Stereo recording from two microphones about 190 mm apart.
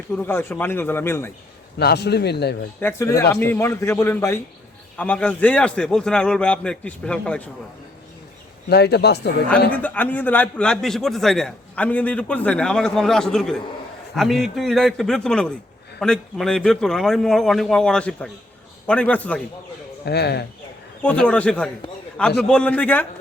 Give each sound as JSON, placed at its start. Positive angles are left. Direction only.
{"t": 0.2, "sound": "a man's voice", "side_deg": 10}
{"t": 1.8, "sound": "a man's voice", "side_deg": 60}
{"t": 3.2, "sound": "a man's voice", "side_deg": 15}
{"t": 8.7, "sound": "a man's voice", "side_deg": 60}
{"t": 9.7, "sound": "a man's voice", "side_deg": 10}
{"t": 20.1, "sound": "a man's voice", "side_deg": 60}
{"t": 21.0, "sound": "a man's voice", "side_deg": 5}